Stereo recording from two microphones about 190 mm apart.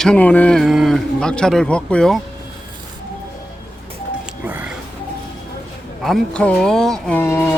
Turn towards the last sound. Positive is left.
turn(degrees=10)  # may be behind; listen again after turning